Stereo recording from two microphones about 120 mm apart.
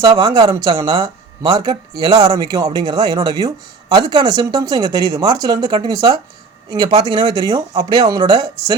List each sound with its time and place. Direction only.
0.0 s speech: 30° right (ahead or behind)